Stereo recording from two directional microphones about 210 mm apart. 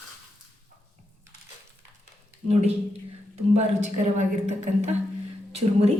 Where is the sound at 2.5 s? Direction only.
30° right (ahead or behind).